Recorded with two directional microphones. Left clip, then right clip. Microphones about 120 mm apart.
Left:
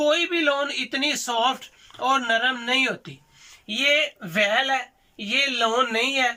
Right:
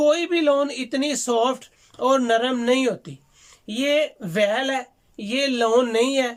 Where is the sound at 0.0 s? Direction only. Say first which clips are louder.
Right 2 dB; 50° right (ahead or behind).